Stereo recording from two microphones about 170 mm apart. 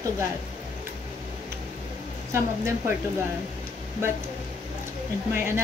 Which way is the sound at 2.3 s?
15° right (ahead or behind).